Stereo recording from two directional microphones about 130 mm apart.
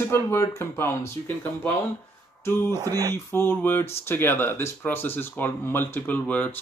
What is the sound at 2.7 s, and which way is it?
Speech, 30° right (ahead or behind).